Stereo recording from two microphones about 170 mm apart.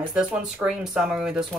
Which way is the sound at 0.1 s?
5° right (ahead or behind).